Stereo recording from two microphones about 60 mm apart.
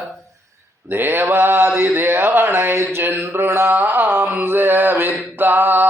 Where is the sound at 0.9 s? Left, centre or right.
Right.